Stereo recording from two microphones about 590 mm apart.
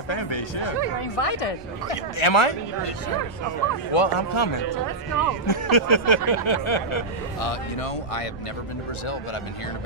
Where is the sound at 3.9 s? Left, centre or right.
Left.